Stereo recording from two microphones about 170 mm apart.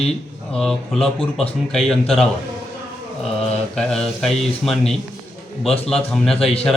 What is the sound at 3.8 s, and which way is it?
Speech, 5° left (ahead or behind).